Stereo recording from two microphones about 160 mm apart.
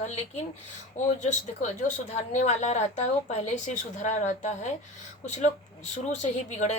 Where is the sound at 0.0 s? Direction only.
45° left (ahead or behind).